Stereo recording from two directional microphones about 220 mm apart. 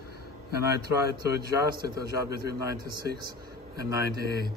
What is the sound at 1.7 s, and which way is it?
A man's voice, 45° right (ahead or behind).